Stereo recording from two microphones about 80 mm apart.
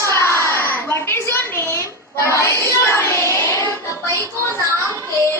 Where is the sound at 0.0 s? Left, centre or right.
Left.